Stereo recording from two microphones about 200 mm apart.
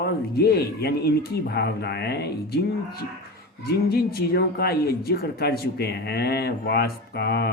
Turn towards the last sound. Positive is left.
turn(degrees=55)  # may be behind; listen again after turning